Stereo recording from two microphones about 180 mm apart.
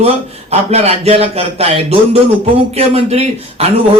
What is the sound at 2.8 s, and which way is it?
Speech, 35° right (ahead or behind).